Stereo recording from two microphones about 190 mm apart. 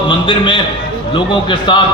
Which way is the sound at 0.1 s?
25° left (ahead or behind).